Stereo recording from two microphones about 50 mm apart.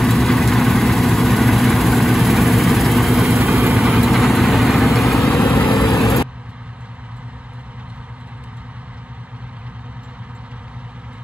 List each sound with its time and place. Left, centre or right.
0.0 s vehicle: centre
5.4 s vehicle: left